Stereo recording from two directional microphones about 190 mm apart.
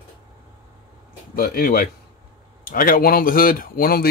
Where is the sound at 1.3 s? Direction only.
50° left (ahead or behind).